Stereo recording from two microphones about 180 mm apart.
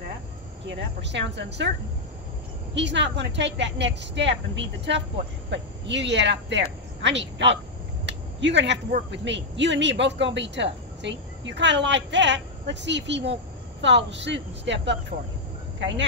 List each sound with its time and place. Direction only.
0.7 s speech: 80° right
2.7 s speech: 80° right
8.0 s a sound: 75° right (ahead or behind)
9.1 s speech: 80° right